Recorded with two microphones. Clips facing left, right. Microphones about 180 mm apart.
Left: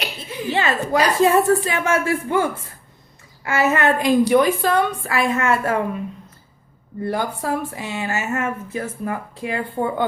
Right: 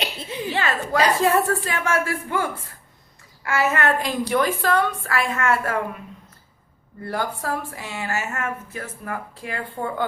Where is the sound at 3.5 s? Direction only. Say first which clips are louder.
Left 3 dB; 20° left (ahead or behind).